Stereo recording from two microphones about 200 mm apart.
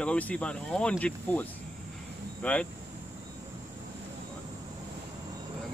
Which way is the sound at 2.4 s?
10° left (ahead or behind).